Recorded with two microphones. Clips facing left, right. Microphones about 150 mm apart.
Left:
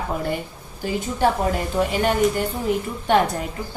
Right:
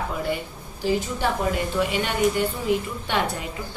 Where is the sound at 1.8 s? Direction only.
40° left (ahead or behind).